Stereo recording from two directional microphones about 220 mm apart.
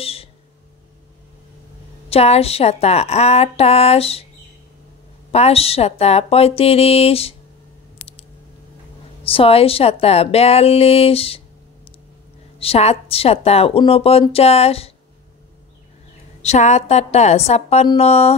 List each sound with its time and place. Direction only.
0.0 s a sound: 25° left (ahead or behind)
2.0 s a woman's voice: 25° left (ahead or behind)
5.3 s a woman's voice: 30° left (ahead or behind)
9.2 s a woman's voice: 25° left (ahead or behind)
12.5 s a woman's voice: 25° left (ahead or behind)
16.4 s a woman's voice: 30° left (ahead or behind)